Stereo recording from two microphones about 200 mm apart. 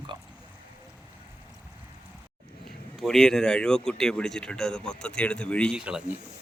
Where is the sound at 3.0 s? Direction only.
Centre (ahead or behind).